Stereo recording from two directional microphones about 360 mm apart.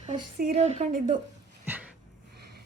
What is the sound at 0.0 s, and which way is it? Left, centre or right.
A woman's voice, centre.